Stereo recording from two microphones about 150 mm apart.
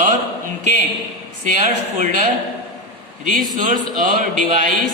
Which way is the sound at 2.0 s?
60° right (ahead or behind).